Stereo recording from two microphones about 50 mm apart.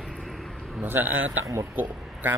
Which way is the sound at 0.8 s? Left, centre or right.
Right.